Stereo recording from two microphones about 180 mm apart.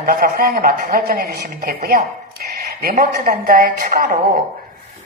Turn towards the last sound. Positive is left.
turn(degrees=-50)  # may be behind; listen again after turning